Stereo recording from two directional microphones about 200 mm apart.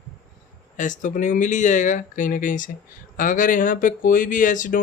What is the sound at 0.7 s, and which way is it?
Speech, 40° left (ahead or behind).